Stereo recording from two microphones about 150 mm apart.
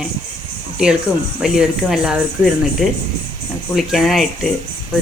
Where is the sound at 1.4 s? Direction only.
5° right (ahead or behind).